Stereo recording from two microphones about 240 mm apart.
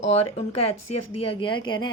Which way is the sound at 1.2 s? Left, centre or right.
Left.